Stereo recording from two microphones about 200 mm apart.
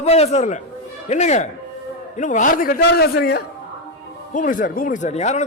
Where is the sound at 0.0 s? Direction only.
30° left (ahead or behind); by 3.4 s 50° left (ahead or behind).